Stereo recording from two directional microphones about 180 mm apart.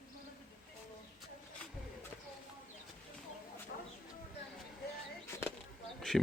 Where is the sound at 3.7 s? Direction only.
65° left (ahead or behind).